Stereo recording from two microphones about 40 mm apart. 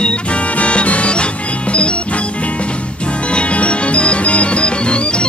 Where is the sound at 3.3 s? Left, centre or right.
Left.